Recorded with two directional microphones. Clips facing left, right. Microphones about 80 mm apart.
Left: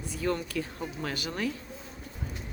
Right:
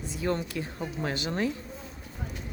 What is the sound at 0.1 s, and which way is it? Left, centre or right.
Speech, right.